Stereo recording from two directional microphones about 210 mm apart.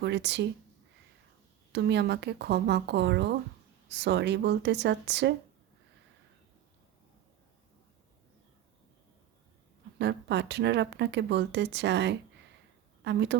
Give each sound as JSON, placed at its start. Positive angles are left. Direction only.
{"t": 0.0, "sound": "speech", "side_deg": -55}
{"t": 1.7, "sound": "speech", "side_deg": -55}
{"t": 10.0, "sound": "speech", "side_deg": -55}